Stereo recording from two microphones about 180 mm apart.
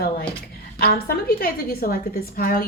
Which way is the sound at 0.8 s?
60° left (ahead or behind).